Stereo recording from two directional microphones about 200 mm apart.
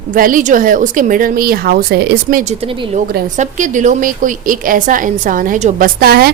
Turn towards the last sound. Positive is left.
turn(degrees=-50)  # may be behind; listen again after turning